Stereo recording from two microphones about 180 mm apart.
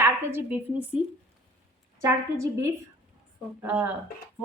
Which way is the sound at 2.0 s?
15° right (ahead or behind).